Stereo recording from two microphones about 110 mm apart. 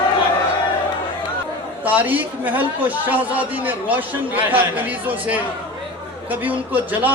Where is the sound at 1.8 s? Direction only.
15° right (ahead or behind).